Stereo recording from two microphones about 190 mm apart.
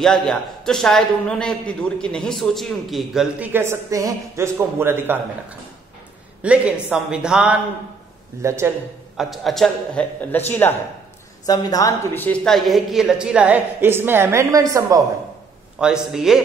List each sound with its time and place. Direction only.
0.0 s a man's voice: centre (ahead or behind)
6.4 s a man's voice: 5° right (ahead or behind)
9.1 s a man's voice: centre (ahead or behind)
11.4 s a man's voice: 20° left (ahead or behind); by 15.0 s 15° right (ahead or behind)
15.8 s a man's voice: 5° right (ahead or behind)